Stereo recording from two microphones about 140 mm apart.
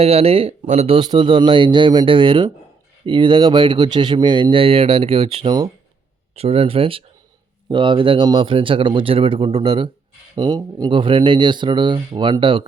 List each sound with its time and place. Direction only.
0.0 s speech: 45° right (ahead or behind)
0.9 s speech: 35° right (ahead or behind)